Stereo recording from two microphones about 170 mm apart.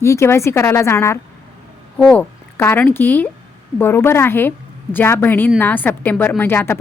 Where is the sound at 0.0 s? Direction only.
15° left (ahead or behind).